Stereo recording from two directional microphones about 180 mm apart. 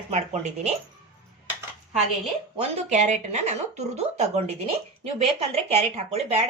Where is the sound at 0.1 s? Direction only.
40° right (ahead or behind).